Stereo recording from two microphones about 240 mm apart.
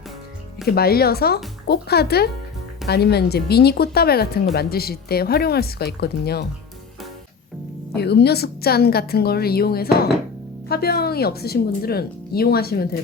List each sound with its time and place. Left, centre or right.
0.7 s speech: left
7.9 s speech: left